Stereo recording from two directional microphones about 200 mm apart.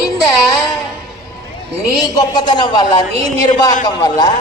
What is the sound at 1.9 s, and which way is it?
A woman's voice, 20° left (ahead or behind).